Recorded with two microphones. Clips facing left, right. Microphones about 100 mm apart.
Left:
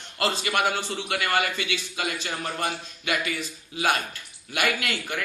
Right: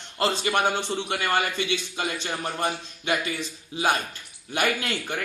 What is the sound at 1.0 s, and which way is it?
A man's voice, 25° right (ahead or behind).